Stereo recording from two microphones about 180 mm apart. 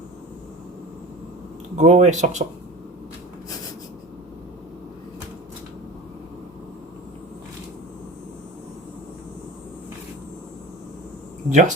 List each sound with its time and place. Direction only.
1.7 s speech: 40° right (ahead or behind)
11.4 s speech: 45° right (ahead or behind)